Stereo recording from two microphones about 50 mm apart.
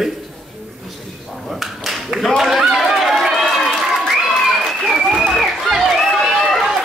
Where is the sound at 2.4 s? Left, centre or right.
Centre.